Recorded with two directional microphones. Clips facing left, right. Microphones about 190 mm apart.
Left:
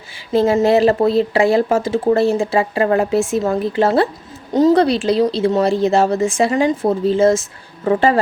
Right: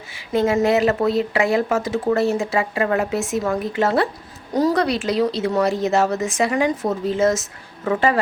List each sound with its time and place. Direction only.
0.3 s speech: 30° left (ahead or behind)